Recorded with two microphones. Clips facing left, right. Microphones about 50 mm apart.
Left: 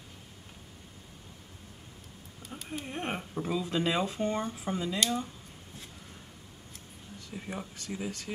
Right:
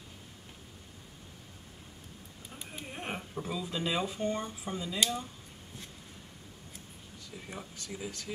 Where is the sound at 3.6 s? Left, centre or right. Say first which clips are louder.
Left 3 dB; left.